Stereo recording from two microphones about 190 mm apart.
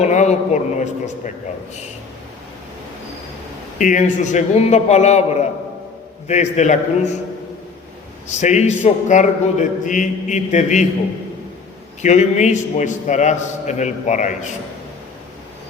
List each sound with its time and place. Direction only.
0.0 s a man's voice: 40° left (ahead or behind)
3.8 s a man's voice: 45° left (ahead or behind)
8.3 s a man's voice: 35° left (ahead or behind)
12.0 s a man's voice: 40° left (ahead or behind)